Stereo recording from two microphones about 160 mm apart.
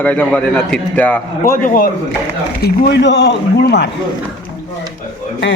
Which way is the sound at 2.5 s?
85° left.